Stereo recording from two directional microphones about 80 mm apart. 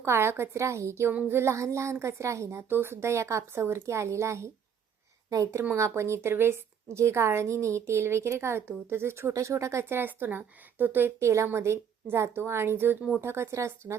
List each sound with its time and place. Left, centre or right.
0.0 s speech: right